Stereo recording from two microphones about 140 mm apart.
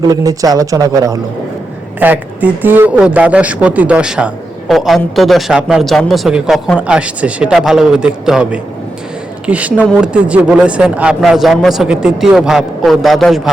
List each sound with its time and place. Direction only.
0.0 s a man's voice: 25° right (ahead or behind)
2.0 s a man's voice: 10° right (ahead or behind)